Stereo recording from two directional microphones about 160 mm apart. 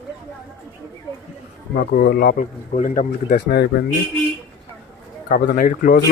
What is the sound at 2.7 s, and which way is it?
Speech, 55° left (ahead or behind).